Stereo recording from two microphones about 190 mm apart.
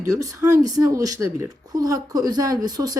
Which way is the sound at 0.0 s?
15° right (ahead or behind).